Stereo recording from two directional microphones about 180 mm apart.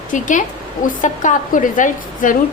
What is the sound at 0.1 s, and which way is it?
A woman's voice, 45° left (ahead or behind).